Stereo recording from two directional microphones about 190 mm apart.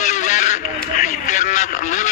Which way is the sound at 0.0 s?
40° left (ahead or behind).